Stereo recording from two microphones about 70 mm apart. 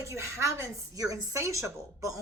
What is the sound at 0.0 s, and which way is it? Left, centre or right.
Speech, right.